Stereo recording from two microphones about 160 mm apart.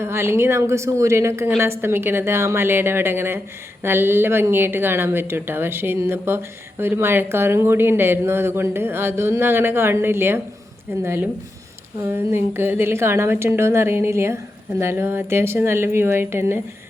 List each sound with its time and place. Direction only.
0.0 s a woman's voice: 15° right (ahead or behind)